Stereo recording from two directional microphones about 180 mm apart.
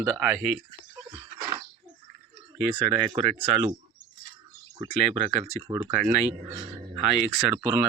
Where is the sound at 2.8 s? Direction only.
25° right (ahead or behind).